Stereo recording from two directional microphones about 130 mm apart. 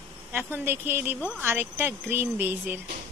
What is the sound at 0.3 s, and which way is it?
A woman's voice, 15° right (ahead or behind).